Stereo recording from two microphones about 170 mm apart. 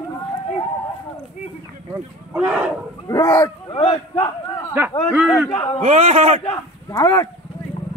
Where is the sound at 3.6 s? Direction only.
35° left (ahead or behind).